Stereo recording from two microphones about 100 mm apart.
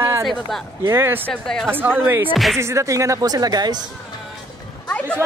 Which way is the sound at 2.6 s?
30° right (ahead or behind).